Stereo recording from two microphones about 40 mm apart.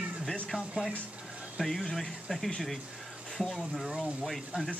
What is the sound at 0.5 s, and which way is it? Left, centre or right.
Speech, right.